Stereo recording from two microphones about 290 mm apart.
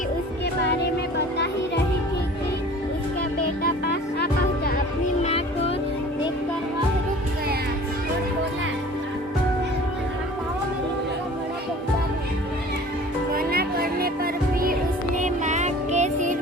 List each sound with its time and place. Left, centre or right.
3.6 s music: left
5.2 s music: centre
13.3 s music: right